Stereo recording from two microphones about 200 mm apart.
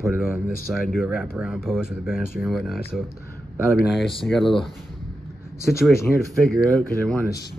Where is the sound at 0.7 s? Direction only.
Centre (ahead or behind).